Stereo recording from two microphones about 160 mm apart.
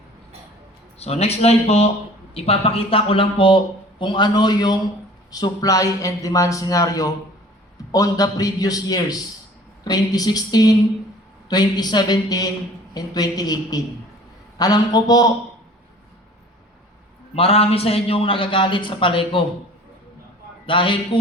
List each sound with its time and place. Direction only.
0.9 s a man's voice: 40° left (ahead or behind); by 15.3 s 25° left (ahead or behind)
17.3 s a man's voice: 40° left (ahead or behind)
20.7 s a man's voice: 30° left (ahead or behind)